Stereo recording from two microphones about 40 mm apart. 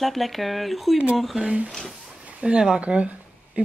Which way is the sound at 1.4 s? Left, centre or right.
Right.